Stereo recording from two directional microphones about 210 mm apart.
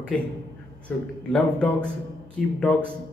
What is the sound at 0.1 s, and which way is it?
A man's voice, 5° left (ahead or behind).